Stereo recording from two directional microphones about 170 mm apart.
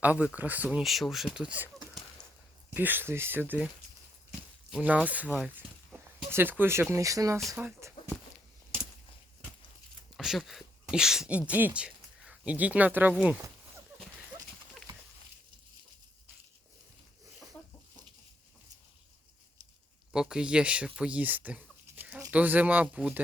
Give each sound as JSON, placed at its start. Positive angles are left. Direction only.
{"t": 0.0, "sound": "speech", "side_deg": -10}
{"t": 7.3, "sound": "speech", "side_deg": 0}
{"t": 7.6, "sound": "speech", "side_deg": -15}
{"t": 10.2, "sound": "speech", "side_deg": 0}
{"t": 20.1, "sound": "speech", "side_deg": -5}